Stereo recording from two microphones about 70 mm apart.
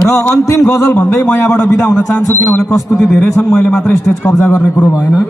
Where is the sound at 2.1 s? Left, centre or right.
Left.